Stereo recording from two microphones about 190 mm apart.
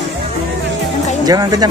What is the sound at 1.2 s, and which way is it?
Speech, 20° right (ahead or behind).